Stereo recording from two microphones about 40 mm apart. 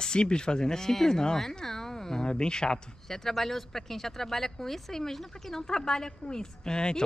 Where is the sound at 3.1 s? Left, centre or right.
Centre.